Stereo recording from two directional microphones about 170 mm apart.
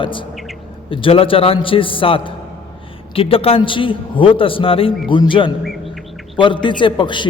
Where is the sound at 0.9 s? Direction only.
30° left (ahead or behind).